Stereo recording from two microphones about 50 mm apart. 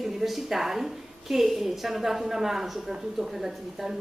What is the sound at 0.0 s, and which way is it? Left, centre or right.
A woman's voice, centre.